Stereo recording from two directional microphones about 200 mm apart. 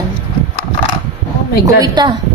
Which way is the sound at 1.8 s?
20° right (ahead or behind).